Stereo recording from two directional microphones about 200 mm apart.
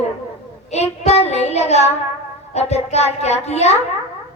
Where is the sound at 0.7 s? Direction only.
30° left (ahead or behind).